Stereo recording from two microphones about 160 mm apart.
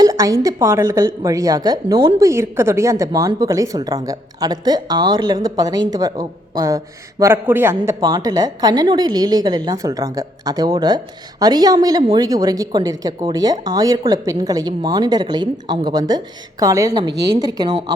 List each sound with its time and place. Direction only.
0.0 s a woman's voice: 20° right (ahead or behind)